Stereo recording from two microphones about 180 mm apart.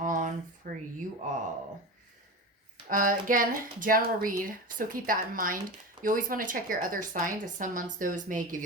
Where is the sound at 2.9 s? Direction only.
50° right (ahead or behind).